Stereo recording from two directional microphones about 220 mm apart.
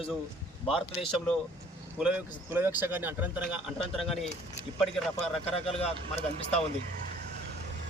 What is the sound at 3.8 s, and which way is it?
Speech, 25° left (ahead or behind).